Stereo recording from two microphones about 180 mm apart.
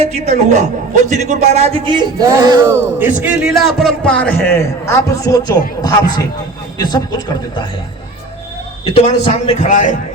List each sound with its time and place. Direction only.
0.0 s a man's voice: 35° right (ahead or behind); by 2.7 s 20° right (ahead or behind)
3.0 s a man's voice: 10° right (ahead or behind); by 7.0 s 25° left (ahead or behind)
8.9 s speech: 35° left (ahead or behind)